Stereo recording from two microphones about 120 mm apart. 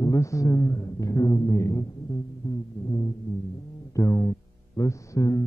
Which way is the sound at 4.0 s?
25° left (ahead or behind).